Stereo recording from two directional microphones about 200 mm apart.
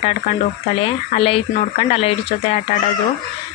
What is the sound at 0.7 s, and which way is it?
Speech, 25° left (ahead or behind).